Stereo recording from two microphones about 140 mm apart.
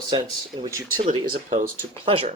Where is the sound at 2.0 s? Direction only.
45° right (ahead or behind).